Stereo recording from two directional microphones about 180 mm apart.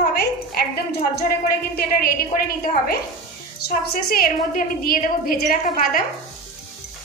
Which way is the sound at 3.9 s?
55° left (ahead or behind).